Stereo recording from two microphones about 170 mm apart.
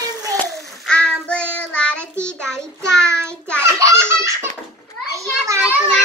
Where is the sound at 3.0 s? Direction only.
15° right (ahead or behind).